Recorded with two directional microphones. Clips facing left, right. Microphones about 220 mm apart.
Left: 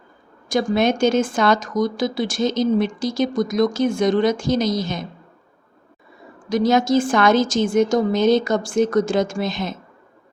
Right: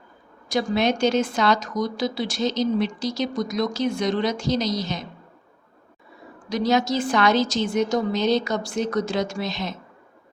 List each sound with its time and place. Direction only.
0.4 s a woman's voice: 50° left (ahead or behind)
6.5 s a woman's voice: 50° left (ahead or behind)